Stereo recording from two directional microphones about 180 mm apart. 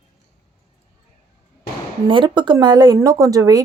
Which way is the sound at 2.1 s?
25° right (ahead or behind).